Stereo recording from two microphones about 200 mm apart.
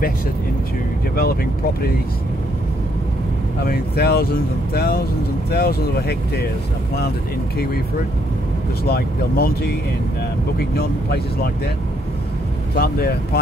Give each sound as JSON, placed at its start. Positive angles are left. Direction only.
{"t": 1.1, "sound": "speech", "side_deg": 50}
{"t": 3.6, "sound": "speech", "side_deg": 50}
{"t": 8.8, "sound": "speech", "side_deg": 50}
{"t": 10.8, "sound": "speech", "side_deg": 50}
{"t": 12.7, "sound": "speech", "side_deg": 50}